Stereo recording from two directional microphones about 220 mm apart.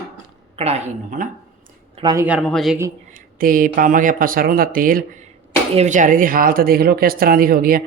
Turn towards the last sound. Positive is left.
turn(degrees=-40)  # may be behind; listen again after turning